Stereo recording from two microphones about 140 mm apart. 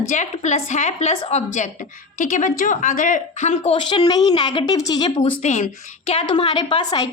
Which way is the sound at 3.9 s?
30° left (ahead or behind).